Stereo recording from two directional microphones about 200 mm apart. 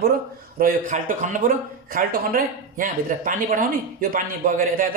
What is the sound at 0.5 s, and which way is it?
Speech, 45° right (ahead or behind).